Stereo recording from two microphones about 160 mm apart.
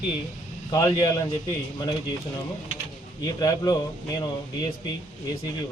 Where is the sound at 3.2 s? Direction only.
25° left (ahead or behind).